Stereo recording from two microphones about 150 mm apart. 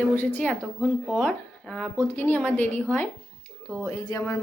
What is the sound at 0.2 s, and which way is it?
Speech, 10° left (ahead or behind).